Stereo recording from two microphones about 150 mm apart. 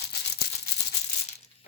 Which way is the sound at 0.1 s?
90° left.